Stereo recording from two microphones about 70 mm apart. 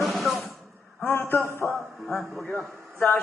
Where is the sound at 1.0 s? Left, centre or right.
Left.